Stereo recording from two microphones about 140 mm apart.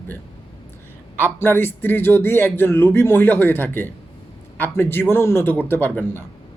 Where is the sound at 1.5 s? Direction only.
15° left (ahead or behind).